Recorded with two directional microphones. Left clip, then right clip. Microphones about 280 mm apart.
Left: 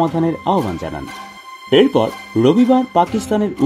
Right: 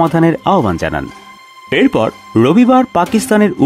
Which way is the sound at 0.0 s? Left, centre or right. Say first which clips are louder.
Right 6 dB; right.